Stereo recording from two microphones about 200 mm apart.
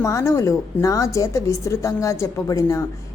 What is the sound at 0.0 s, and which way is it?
Speech, 15° left (ahead or behind).